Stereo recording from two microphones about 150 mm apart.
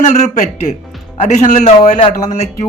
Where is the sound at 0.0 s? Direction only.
50° left (ahead or behind).